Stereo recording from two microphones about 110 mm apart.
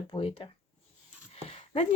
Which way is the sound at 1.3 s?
70° left (ahead or behind).